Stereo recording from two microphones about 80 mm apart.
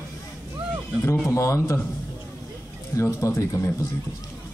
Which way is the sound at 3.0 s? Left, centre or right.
Left.